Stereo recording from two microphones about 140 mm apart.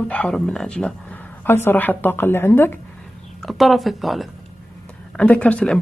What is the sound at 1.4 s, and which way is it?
A woman's voice, 15° left (ahead or behind).